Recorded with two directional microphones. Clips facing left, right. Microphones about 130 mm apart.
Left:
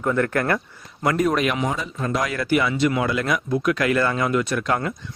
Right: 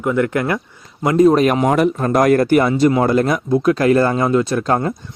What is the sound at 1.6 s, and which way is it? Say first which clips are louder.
Speech: right 11 dB; 65° right (ahead or behind).